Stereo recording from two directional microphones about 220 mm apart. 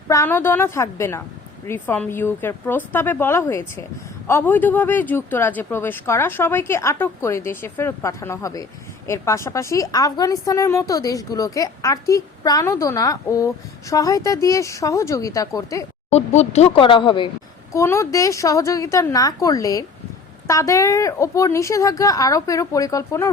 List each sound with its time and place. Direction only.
0.1 s a woman's voice: 10° left (ahead or behind)
16.0 s a woman's voice: 30° left (ahead or behind); by 23.3 s 15° left (ahead or behind)